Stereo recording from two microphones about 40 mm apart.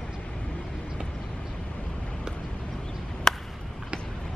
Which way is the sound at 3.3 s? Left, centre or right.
Centre.